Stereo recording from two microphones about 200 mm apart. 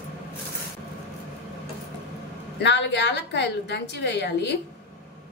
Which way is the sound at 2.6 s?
60° left (ahead or behind).